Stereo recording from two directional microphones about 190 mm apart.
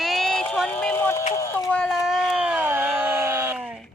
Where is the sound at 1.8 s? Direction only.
Centre (ahead or behind).